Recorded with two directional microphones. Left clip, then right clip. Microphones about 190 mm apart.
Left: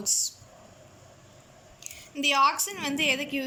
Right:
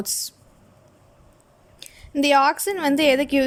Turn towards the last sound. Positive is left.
turn(degrees=-55)  # may be behind; listen again after turning